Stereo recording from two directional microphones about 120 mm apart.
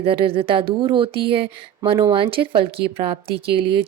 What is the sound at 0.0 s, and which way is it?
A woman's voice, 50° right (ahead or behind).